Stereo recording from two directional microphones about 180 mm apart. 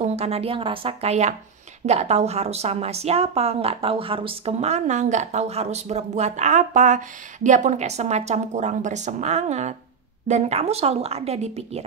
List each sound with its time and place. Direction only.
0.0 s a woman's voice: 35° right (ahead or behind)